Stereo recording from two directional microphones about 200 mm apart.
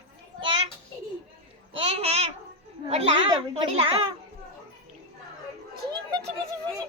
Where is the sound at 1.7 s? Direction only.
30° right (ahead or behind).